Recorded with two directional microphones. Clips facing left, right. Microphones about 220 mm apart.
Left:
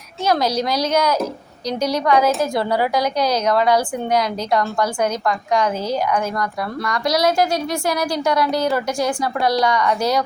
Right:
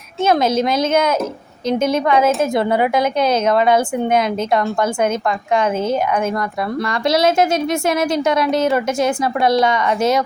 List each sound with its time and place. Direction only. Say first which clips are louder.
0.3 s a woman's voice: right 3 dB; 25° right (ahead or behind)